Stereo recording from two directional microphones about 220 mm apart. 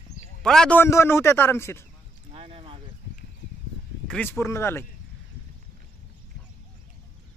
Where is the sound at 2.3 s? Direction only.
25° right (ahead or behind).